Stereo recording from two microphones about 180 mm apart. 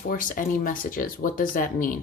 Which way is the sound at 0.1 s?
50° left (ahead or behind).